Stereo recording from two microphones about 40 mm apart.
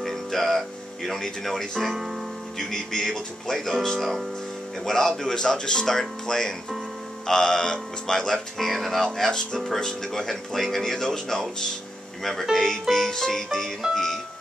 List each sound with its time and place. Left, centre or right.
0.0 s speech: centre
8.5 s speech: centre